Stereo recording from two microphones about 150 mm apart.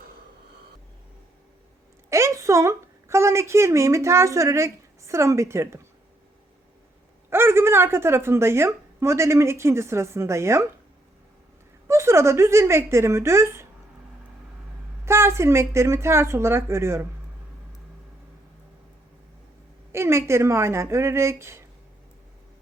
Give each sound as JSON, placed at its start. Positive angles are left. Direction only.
{"t": 2.0, "sound": "a woman's voice", "side_deg": -20}
{"t": 7.3, "sound": "a woman's voice", "side_deg": -15}
{"t": 11.9, "sound": "a woman's voice", "side_deg": -20}
{"t": 15.0, "sound": "a woman's voice", "side_deg": -15}
{"t": 19.9, "sound": "a woman's voice", "side_deg": -15}